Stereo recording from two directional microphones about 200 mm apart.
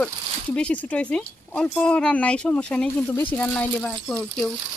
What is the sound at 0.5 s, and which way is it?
Speech, 5° left (ahead or behind).